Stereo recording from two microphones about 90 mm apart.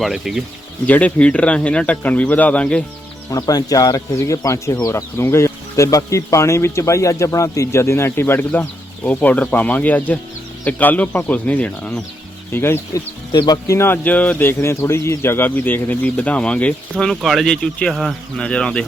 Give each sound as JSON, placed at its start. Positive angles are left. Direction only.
{"t": 0.0, "sound": "speech", "side_deg": 0}
{"t": 0.9, "sound": "speech", "side_deg": 15}
{"t": 3.2, "sound": "speech", "side_deg": 45}
{"t": 13.3, "sound": "speech", "side_deg": 50}
{"t": 13.7, "sound": "speech", "side_deg": 25}